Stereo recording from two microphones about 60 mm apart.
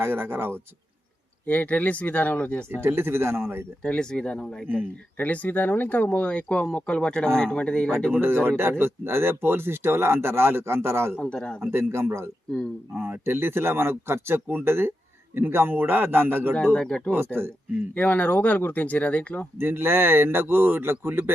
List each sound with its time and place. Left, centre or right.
0.0 s speech: right
1.5 s speech: left
2.8 s speech: right
3.8 s speech: centre
5.1 s speech: left
8.1 s speech: right
16.7 s speech: centre
17.9 s speech: left
19.5 s speech: right